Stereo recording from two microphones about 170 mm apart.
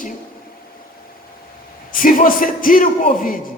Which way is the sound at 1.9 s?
50° left (ahead or behind).